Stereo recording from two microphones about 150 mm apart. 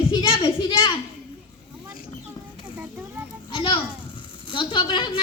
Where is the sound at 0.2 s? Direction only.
30° left (ahead or behind).